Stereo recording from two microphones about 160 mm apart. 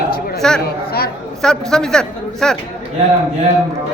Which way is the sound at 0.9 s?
75° left (ahead or behind).